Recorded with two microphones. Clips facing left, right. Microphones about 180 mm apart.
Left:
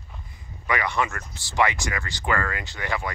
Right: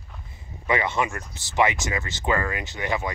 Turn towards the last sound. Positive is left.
turn(degrees=-20)  # may be behind; listen again after turning